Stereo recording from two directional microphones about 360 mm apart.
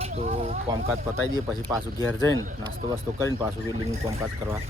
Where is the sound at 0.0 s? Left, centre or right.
Centre.